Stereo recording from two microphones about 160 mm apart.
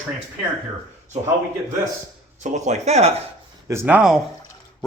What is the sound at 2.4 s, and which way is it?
Speech, 50° right (ahead or behind).